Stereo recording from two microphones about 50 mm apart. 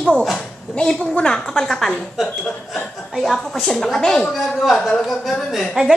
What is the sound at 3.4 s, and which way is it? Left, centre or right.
A woman's voice, centre.